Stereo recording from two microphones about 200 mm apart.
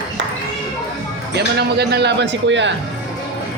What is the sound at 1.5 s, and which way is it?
A man's voice, 55° right (ahead or behind).